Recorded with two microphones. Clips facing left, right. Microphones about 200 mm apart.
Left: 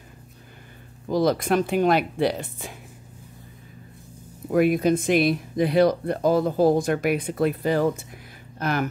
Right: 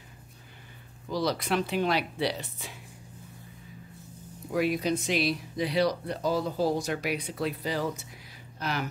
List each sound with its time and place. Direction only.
1.0 s speech: 50° left (ahead or behind)
4.5 s speech: 50° left (ahead or behind)